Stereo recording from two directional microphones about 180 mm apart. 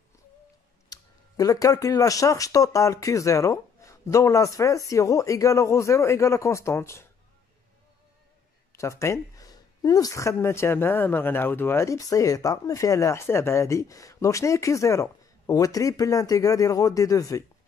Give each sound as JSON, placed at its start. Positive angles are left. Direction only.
{"t": 0.8, "sound": "speech", "side_deg": 20}
{"t": 8.7, "sound": "speech", "side_deg": 15}